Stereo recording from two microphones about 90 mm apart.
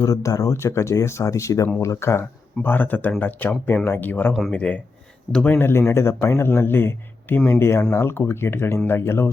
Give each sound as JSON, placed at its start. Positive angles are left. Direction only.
{"t": 0.0, "sound": "speech", "side_deg": 35}
{"t": 5.5, "sound": "speech", "side_deg": 25}
{"t": 7.6, "sound": "speech", "side_deg": 30}